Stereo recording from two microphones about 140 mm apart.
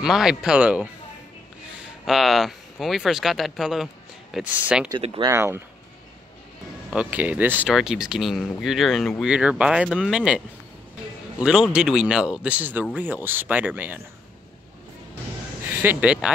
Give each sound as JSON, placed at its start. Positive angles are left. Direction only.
{"t": 0.0, "sound": "speech", "side_deg": -5}
{"t": 2.0, "sound": "speech", "side_deg": 0}
{"t": 4.9, "sound": "speech", "side_deg": -35}
{"t": 5.3, "sound": "speech", "side_deg": -20}
{"t": 6.9, "sound": "speech", "side_deg": -10}
{"t": 11.4, "sound": "speech", "side_deg": -5}
{"t": 15.8, "sound": "speech", "side_deg": -10}